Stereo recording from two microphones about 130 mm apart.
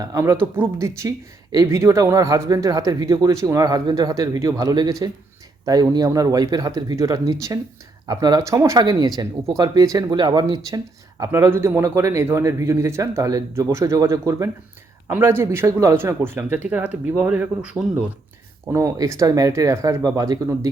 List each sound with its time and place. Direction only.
0.0 s a man's voice: 25° right (ahead or behind)
11.2 s a man's voice: 20° right (ahead or behind)
18.6 s a man's voice: 20° right (ahead or behind)